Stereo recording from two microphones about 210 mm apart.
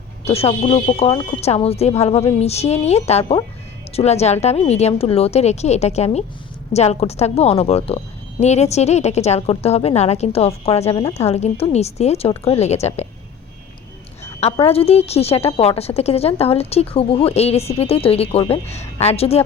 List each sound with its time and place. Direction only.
0.3 s a woman's voice: 30° left (ahead or behind)
14.6 s speech: 30° left (ahead or behind)